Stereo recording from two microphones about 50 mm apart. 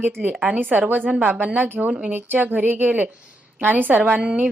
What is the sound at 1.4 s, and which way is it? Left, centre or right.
A woman's voice, right.